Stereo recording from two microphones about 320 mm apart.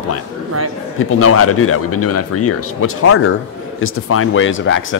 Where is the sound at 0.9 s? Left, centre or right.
Left.